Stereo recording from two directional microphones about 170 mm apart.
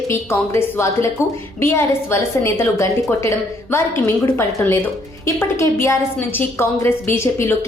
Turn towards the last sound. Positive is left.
turn(degrees=15)  # may be behind; listen again after turning